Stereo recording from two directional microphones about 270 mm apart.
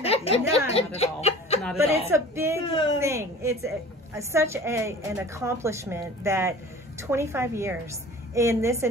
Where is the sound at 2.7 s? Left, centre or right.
Centre.